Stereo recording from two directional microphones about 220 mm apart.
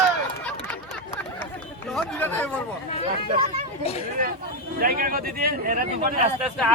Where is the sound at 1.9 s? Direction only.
5° left (ahead or behind).